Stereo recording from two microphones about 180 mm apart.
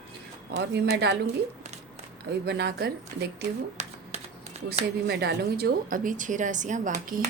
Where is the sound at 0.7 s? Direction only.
70° right (ahead or behind).